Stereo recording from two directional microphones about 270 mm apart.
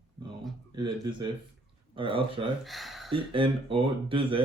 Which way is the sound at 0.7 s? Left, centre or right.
Centre.